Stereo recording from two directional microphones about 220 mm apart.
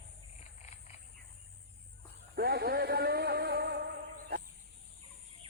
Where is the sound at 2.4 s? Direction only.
45° right (ahead or behind).